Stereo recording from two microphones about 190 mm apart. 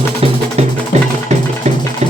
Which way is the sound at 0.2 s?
30° right (ahead or behind).